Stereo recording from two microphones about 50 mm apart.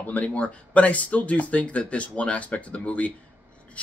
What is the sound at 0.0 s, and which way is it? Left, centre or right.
Speech, left.